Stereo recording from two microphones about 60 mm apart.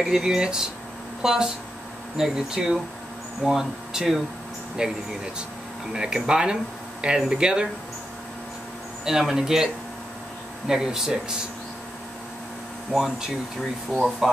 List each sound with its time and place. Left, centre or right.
0.0 s speech: centre
9.3 s speech: centre
10.7 s speech: centre
12.9 s speech: centre